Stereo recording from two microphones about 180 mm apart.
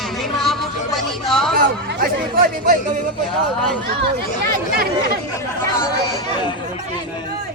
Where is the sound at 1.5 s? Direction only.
55° right (ahead or behind).